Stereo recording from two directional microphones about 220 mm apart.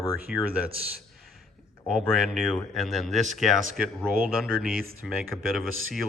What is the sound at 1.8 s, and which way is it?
Speech, centre (ahead or behind).